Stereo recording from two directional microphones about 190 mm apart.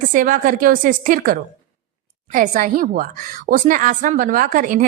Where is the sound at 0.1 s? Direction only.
45° right (ahead or behind).